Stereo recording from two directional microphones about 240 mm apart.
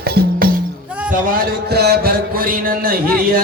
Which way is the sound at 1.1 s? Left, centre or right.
Right.